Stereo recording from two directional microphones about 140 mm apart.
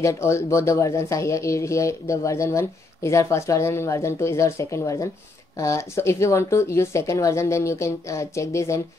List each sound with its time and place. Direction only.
0.0 s speech: 20° left (ahead or behind)